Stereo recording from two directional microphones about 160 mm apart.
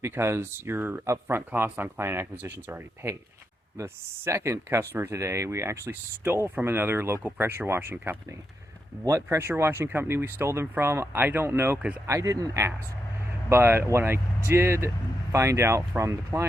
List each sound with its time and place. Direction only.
0.0 s speech: 15° right (ahead or behind)